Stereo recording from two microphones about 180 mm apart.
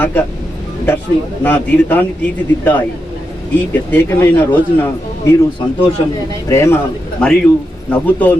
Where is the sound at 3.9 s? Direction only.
10° left (ahead or behind).